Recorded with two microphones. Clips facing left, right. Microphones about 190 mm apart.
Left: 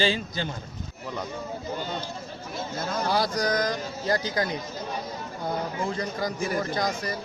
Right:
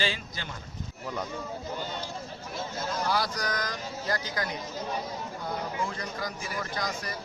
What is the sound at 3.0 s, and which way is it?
A man's voice, 25° left (ahead or behind).